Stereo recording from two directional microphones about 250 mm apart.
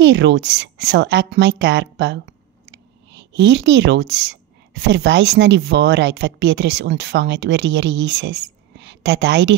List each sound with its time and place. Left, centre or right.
0.0 s a woman's voice: right